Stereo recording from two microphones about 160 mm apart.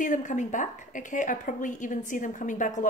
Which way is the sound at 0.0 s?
50° left (ahead or behind).